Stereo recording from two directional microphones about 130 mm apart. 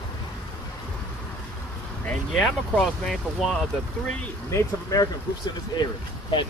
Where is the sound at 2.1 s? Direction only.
5° left (ahead or behind).